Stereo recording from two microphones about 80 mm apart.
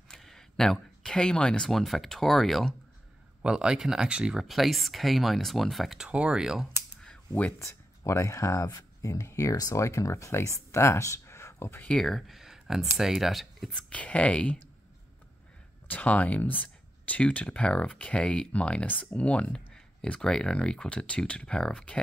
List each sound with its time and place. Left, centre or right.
0.1 s speech: centre
3.4 s speech: centre
6.0 s speech: centre
7.5 s speech: left
12.0 s speech: centre
13.9 s speech: centre
15.9 s speech: centre